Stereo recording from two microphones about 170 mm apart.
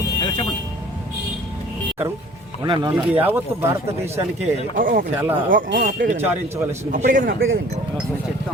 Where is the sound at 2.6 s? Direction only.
25° right (ahead or behind).